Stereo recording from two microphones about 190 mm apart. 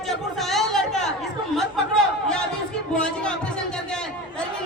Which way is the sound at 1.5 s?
5° left (ahead or behind).